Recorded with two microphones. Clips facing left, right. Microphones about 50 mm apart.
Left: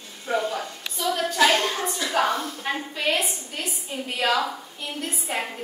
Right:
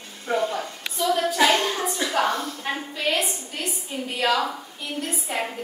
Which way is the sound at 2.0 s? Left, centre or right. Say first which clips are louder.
Left 1 dB; centre.